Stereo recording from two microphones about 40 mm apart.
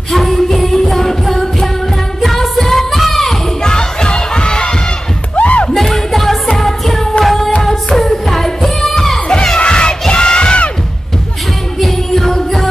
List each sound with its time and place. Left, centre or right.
0.1 s music: centre
3.6 s crowd: left
5.3 s music: left
5.7 s music: centre
9.3 s crowd: centre
9.6 s battle cry: left
11.8 s music: centre